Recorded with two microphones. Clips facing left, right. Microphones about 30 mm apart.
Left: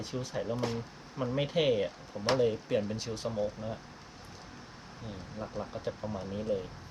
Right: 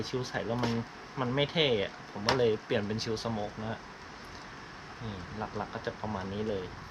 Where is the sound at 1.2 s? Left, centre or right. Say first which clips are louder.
Even; right.